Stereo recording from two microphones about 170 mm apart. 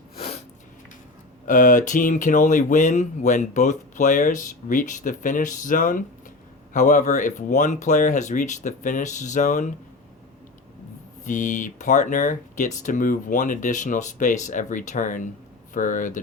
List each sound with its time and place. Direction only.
1.5 s speech: 50° left (ahead or behind)
11.2 s speech: 50° left (ahead or behind)